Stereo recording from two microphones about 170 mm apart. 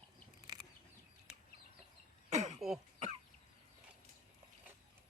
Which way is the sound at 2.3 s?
45° right (ahead or behind).